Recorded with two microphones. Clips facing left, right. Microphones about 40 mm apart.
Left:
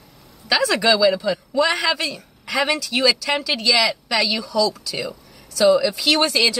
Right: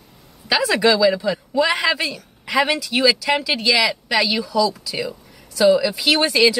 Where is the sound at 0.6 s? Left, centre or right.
Centre.